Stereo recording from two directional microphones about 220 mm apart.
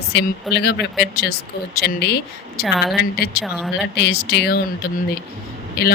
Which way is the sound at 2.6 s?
Centre (ahead or behind).